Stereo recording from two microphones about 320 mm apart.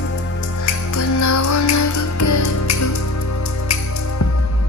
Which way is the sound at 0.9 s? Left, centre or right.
Left.